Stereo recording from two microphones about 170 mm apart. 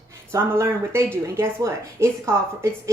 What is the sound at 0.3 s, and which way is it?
Speech, 15° right (ahead or behind).